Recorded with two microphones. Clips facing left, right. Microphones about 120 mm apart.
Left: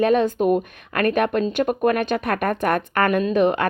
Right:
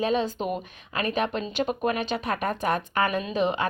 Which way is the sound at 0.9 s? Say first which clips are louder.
Left 7 dB; 60° left (ahead or behind).